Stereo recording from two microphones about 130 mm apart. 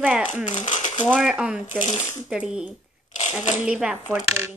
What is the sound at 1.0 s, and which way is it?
Speech, centre (ahead or behind).